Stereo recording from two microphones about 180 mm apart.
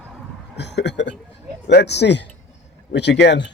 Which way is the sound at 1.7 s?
70° left (ahead or behind).